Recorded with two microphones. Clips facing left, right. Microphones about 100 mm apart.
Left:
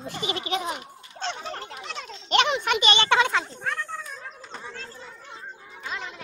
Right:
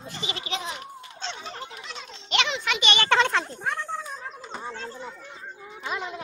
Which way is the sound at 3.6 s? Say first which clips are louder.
Right 1 dB; 10° right (ahead or behind).